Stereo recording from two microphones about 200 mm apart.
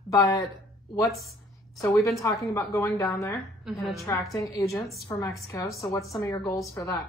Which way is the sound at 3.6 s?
Centre (ahead or behind).